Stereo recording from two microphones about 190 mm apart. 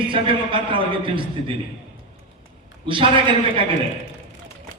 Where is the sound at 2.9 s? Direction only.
25° right (ahead or behind).